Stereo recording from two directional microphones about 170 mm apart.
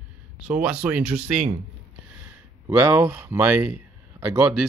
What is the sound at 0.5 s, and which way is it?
Speech, 5° right (ahead or behind).